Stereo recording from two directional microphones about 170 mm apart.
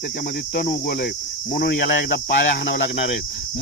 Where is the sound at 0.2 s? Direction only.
60° left (ahead or behind).